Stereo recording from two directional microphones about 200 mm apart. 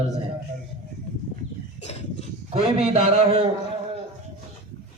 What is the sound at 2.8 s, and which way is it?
Speech, 35° right (ahead or behind).